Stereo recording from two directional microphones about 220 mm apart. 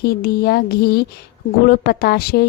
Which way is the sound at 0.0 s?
45° left (ahead or behind).